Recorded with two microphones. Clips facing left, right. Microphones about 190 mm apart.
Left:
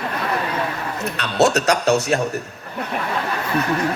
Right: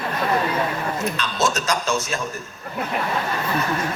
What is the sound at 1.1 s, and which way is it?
A man's voice, 65° left (ahead or behind).